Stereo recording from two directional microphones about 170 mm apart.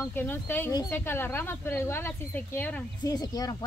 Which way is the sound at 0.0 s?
10° left (ahead or behind).